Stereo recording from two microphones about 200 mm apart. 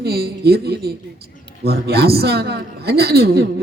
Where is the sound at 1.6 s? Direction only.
50° right (ahead or behind).